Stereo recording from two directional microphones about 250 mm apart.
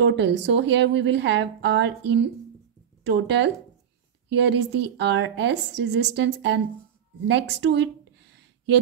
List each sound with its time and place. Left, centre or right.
0.0 s a woman's voice: right